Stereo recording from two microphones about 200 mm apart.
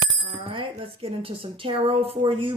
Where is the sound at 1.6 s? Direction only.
25° right (ahead or behind).